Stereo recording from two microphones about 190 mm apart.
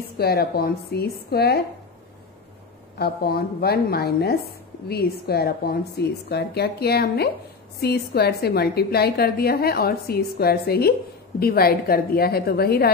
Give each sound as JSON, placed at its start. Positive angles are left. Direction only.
{"t": 0.2, "sound": "a woman's voice", "side_deg": 55}
{"t": 3.0, "sound": "a woman's voice", "side_deg": 55}